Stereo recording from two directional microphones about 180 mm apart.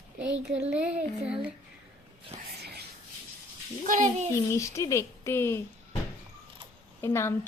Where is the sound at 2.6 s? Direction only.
65° right (ahead or behind).